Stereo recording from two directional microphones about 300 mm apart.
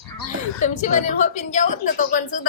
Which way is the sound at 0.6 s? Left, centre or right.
Left.